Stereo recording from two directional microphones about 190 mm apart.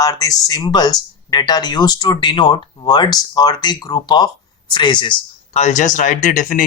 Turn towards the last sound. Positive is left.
turn(degrees=45)  # may be behind; listen again after turning